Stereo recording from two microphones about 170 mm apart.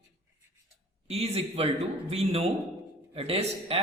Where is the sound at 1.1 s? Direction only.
35° right (ahead or behind).